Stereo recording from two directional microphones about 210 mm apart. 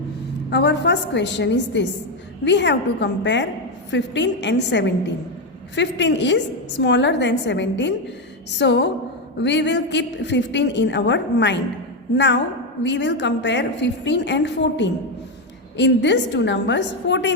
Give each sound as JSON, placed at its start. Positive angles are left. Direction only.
{"t": 0.5, "sound": "a woman's voice", "side_deg": 55}